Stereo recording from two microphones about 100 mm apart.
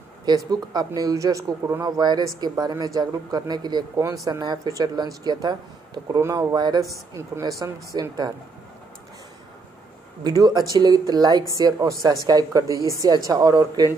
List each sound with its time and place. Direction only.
0.5 s speech: 40° right (ahead or behind)
4.0 s speech: 35° right (ahead or behind)
7.2 s speech: 30° right (ahead or behind)
10.2 s speech: 40° right (ahead or behind)